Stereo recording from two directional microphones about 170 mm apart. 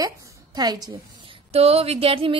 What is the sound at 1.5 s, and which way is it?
Speech, 35° right (ahead or behind).